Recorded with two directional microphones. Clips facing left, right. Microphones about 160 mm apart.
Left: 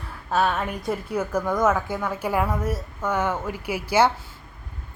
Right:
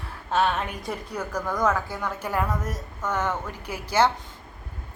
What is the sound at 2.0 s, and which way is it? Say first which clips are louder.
Speech: left 3 dB; 10° left (ahead or behind).